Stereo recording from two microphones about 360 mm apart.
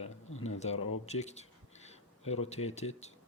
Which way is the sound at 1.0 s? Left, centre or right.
Centre.